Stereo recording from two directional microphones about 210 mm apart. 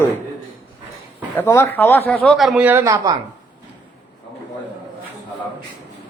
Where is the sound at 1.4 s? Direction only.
10° left (ahead or behind); by 3.1 s 15° right (ahead or behind).